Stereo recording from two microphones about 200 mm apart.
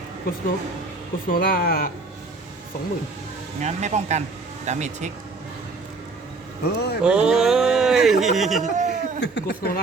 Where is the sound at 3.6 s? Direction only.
35° right (ahead or behind).